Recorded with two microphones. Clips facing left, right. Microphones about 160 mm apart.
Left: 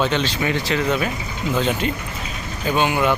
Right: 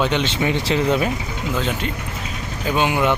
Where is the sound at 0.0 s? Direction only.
20° right (ahead or behind).